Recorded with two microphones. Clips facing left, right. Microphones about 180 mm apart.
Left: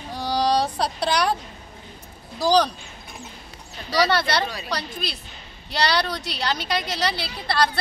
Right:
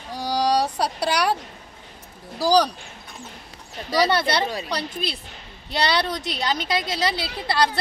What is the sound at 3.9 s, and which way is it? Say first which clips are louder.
Speech: right 1 dB; 20° right (ahead or behind).